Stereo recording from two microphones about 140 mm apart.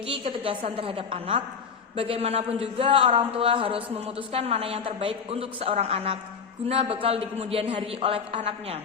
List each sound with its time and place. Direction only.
0.1 s a woman's voice: 40° right (ahead or behind)